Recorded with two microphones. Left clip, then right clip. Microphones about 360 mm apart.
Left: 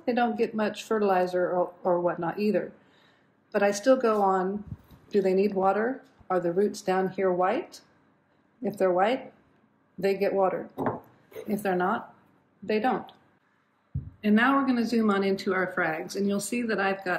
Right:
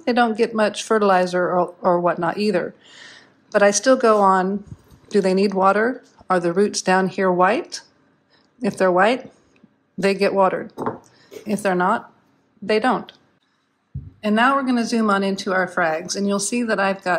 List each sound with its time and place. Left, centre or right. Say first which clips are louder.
0.0 s speech: right 8 dB; right
11.6 s speech: right 8 dB; centre
14.2 s speech: right 6 dB; centre